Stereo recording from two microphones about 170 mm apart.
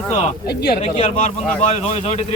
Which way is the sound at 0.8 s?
40° left (ahead or behind).